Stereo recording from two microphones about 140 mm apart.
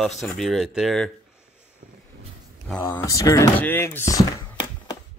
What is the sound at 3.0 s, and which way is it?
Speech, 25° left (ahead or behind).